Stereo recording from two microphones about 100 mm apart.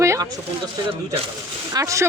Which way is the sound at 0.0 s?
30° right (ahead or behind).